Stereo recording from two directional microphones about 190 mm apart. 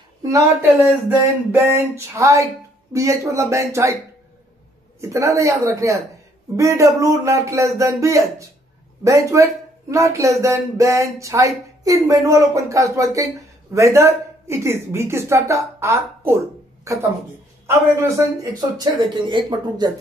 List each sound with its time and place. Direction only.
0.2 s speech: 15° right (ahead or behind)
5.0 s speech: 15° right (ahead or behind)